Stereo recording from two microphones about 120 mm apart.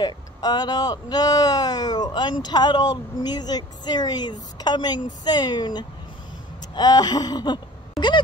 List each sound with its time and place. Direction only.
0.0 s a woman's voice: 35° left (ahead or behind)